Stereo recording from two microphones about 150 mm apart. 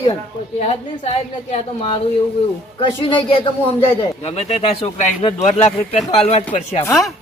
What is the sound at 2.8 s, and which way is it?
Speech, 35° left (ahead or behind).